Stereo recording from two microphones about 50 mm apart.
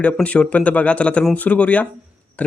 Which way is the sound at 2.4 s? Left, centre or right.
Left.